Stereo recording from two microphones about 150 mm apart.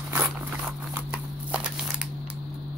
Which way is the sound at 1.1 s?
10° right (ahead or behind).